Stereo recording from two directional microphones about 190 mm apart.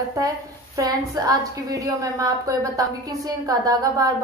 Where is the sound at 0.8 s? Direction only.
20° right (ahead or behind).